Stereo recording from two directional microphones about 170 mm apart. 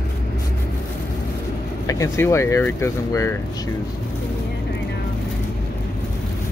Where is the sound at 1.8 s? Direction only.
20° left (ahead or behind).